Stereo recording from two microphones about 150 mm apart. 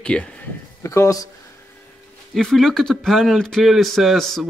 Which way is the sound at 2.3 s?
Centre (ahead or behind).